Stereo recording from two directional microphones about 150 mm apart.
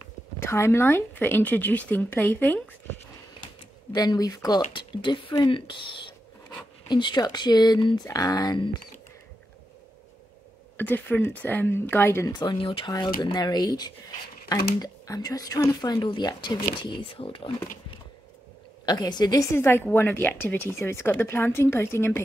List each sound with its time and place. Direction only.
0.4 s a woman's voice: 15° left (ahead or behind)
3.9 s speech: 25° left (ahead or behind)
4.6 s speech: 35° left (ahead or behind)
10.8 s a woman's voice: 15° left (ahead or behind)
12.3 s speech: 30° left (ahead or behind)
18.9 s a woman's voice: 30° left (ahead or behind)